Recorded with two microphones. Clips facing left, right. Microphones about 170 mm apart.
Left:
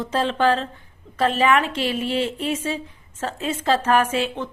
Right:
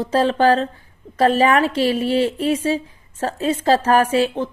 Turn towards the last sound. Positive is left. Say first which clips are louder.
# right 5 dB
turn(degrees=-35)  # may be behind; listen again after turning